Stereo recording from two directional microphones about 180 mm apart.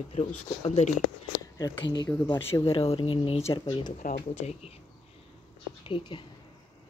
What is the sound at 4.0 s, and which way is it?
Speech, 40° left (ahead or behind).